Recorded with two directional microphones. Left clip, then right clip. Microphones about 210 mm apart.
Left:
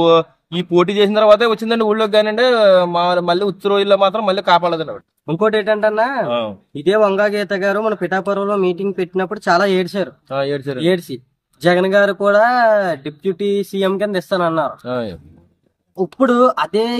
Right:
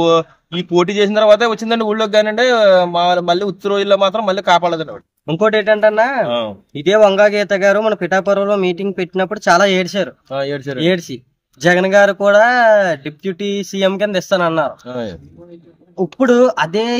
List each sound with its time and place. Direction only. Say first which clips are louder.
0.0 s a man's voice: left 1 dB; 5° left (ahead or behind)
5.2 s speech: right 2 dB; 30° right (ahead or behind)
6.2 s a man's voice: right 1 dB; centre (ahead or behind)
6.7 s speech: right 4 dB; 30° right (ahead or behind)
10.3 s a man's voice: left 2 dB; 5° left (ahead or behind)
10.8 s speech: right 3 dB; 30° right (ahead or behind)
14.9 s a man's voice: left 2 dB; centre (ahead or behind)
16.0 s speech: right 2 dB; 30° right (ahead or behind)